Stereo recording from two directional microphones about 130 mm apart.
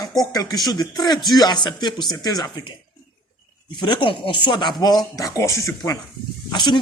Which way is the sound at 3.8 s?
35° left (ahead or behind).